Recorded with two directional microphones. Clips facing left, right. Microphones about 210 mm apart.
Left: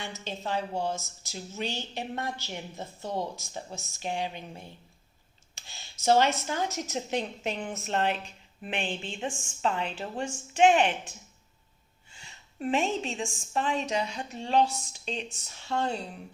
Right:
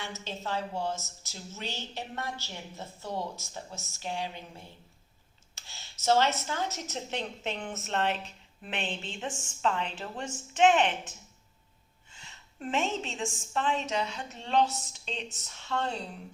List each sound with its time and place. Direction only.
0.0 s a woman's voice: 15° left (ahead or behind)
12.2 s a woman's voice: 10° left (ahead or behind)